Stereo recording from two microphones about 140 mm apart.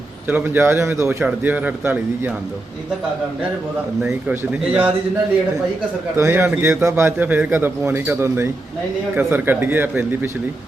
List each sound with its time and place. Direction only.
0.3 s a man's voice: 15° right (ahead or behind)
4.0 s a man's voice: 10° right (ahead or behind)
6.1 s a man's voice: 20° right (ahead or behind)